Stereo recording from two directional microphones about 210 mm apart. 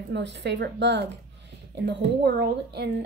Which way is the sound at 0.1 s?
55° right (ahead or behind).